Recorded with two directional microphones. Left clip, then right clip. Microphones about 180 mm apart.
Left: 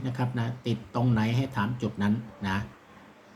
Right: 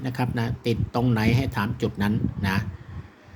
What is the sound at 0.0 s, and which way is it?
Speech, 40° right (ahead or behind).